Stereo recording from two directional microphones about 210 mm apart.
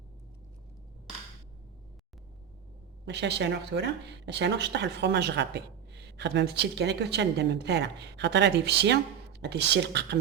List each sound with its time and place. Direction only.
3.1 s a woman's voice: 55° right (ahead or behind)